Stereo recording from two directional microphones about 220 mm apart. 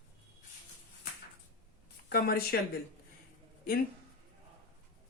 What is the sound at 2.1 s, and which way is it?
Speech, 45° left (ahead or behind).